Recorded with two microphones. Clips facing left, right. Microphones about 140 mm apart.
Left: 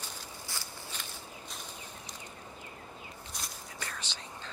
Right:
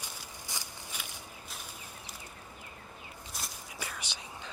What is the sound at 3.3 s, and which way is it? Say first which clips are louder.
Whispering: right 2 dB; 5° right (ahead or behind).